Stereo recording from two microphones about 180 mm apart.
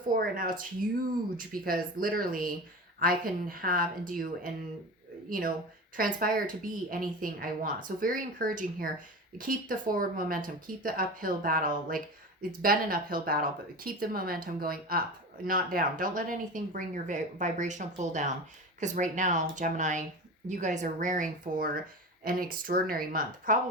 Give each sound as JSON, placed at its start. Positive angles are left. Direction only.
{"t": 0.2, "sound": "speech", "side_deg": -50}